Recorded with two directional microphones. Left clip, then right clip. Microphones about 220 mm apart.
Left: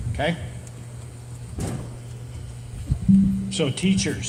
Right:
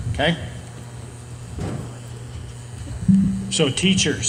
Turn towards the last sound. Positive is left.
turn(degrees=-40)  # may be behind; listen again after turning